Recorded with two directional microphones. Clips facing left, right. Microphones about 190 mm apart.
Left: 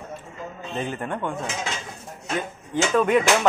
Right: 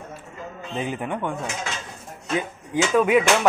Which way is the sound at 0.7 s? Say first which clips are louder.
Right 1 dB; 10° right (ahead or behind).